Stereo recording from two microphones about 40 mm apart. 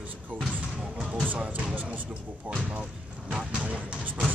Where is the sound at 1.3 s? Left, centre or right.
Right.